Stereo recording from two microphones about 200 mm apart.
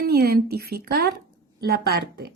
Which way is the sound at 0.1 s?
50° right (ahead or behind).